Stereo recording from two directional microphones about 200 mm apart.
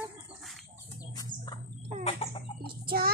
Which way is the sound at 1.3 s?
45° right (ahead or behind).